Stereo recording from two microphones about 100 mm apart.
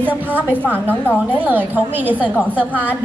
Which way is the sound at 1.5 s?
20° right (ahead or behind).